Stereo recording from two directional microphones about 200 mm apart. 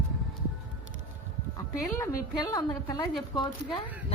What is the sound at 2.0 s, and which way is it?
A woman's voice, 15° left (ahead or behind).